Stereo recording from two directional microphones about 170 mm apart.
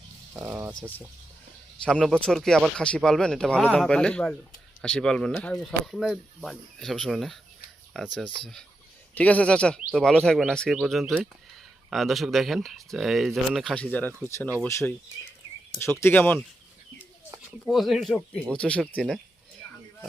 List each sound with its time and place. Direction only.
0.3 s speech: 15° right (ahead or behind)
0.7 s speech: 10° left (ahead or behind)
17.7 s speech: centre (ahead or behind)